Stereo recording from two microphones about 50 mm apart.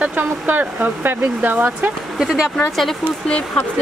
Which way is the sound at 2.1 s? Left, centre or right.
Centre.